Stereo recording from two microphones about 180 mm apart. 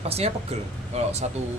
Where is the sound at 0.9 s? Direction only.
35° right (ahead or behind).